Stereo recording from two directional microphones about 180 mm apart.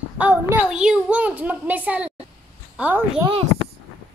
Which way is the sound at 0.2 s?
10° right (ahead or behind).